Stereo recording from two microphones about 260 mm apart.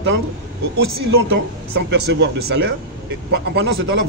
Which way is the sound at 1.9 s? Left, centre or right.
Right.